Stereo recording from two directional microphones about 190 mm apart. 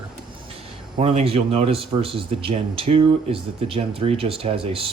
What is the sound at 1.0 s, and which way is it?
Speech, 30° right (ahead or behind).